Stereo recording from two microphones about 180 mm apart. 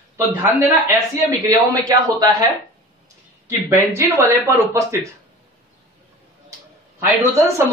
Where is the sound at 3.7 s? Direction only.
15° right (ahead or behind).